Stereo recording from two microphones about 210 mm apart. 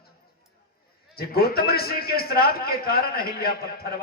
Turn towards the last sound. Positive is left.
turn(degrees=45)  # may be behind; listen again after turning